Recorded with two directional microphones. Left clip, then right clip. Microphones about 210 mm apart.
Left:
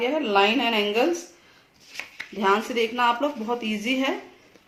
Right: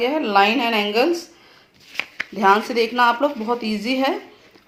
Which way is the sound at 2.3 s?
25° right (ahead or behind).